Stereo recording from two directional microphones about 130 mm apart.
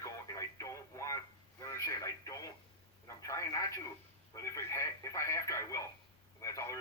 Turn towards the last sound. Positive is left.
turn(degrees=25)  # may be behind; listen again after turning